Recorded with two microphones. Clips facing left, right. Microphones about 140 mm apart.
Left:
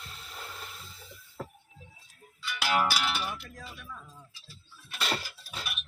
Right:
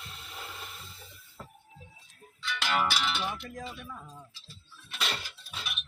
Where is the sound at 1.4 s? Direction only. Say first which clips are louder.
Left 7 dB; 65° left (ahead or behind).